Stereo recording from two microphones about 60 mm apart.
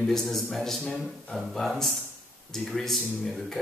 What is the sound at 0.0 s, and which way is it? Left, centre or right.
Speech, centre.